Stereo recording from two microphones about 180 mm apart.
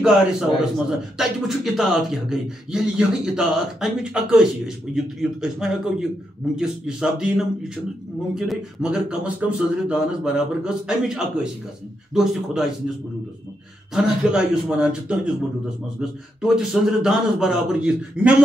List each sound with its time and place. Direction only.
0.0 s speech: 5° right (ahead or behind)
13.9 s speech: 5° right (ahead or behind)